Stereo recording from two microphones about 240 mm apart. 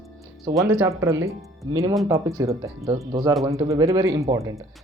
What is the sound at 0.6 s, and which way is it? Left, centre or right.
Speech, centre.